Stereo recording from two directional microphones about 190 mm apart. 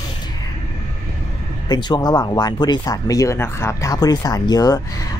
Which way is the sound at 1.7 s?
20° left (ahead or behind).